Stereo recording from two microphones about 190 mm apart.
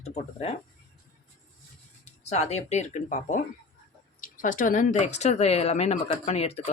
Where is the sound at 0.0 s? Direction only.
35° left (ahead or behind).